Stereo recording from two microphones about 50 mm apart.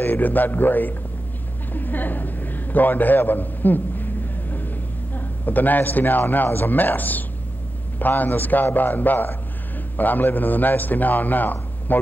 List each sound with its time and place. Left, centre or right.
0.0 s a man's voice: left